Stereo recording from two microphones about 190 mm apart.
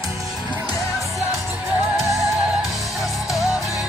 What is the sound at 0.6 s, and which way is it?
Music, 15° left (ahead or behind).